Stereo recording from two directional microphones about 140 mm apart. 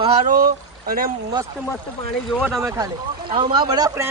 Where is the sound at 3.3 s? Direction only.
35° right (ahead or behind).